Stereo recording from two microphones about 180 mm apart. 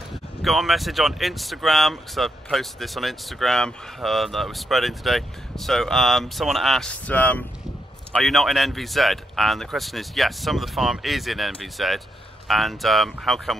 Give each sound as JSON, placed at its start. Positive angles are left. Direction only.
{"t": 0.4, "sound": "speech", "side_deg": 0}